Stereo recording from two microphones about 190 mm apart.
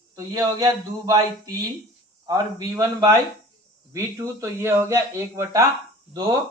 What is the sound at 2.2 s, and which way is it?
A man's voice, 15° right (ahead or behind).